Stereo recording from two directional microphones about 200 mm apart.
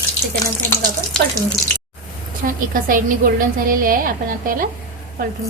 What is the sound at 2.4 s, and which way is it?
A woman's voice, 45° right (ahead or behind).